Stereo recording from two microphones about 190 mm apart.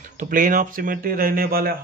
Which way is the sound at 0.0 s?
45° right (ahead or behind).